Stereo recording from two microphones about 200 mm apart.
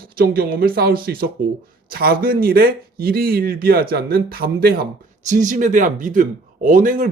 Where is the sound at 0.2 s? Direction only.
50° right (ahead or behind).